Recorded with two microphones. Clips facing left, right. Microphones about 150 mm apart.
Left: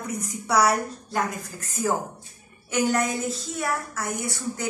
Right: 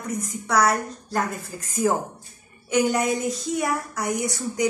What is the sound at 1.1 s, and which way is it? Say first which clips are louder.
Speech: right 1 dB; centre (ahead or behind).